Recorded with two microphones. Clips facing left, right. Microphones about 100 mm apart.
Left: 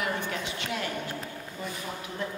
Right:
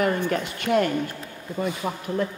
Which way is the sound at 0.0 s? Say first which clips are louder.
Right 8 dB; 50° right (ahead or behind).